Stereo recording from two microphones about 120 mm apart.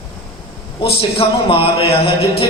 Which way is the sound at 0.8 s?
50° left (ahead or behind).